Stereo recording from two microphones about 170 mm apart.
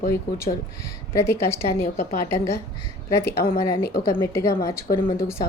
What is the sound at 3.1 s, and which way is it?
Speech, 15° left (ahead or behind).